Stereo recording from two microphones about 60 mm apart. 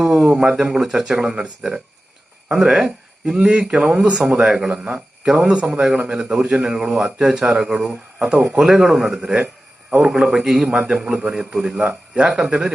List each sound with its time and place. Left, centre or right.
0.0 s speech: centre
10.8 s speech: centre